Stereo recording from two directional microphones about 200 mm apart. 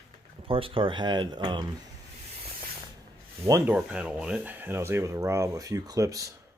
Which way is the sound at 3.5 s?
15° right (ahead or behind).